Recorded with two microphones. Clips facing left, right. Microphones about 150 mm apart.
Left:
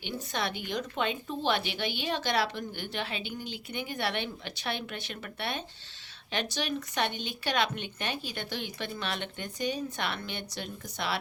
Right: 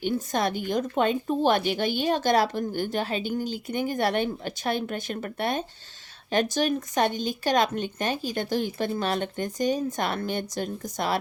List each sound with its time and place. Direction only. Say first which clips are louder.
0.0 s a woman's voice: right 8 dB; 45° right (ahead or behind)